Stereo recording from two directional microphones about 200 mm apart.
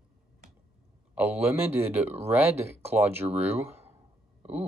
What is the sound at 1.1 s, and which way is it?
Speech, 10° right (ahead or behind).